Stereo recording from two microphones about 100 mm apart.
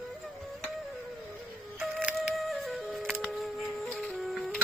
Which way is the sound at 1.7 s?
10° right (ahead or behind).